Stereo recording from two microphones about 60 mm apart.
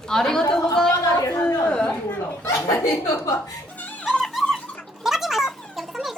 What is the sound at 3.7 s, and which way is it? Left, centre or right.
Music, left.